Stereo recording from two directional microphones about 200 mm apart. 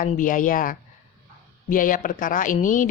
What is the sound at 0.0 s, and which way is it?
Speech, 40° left (ahead or behind).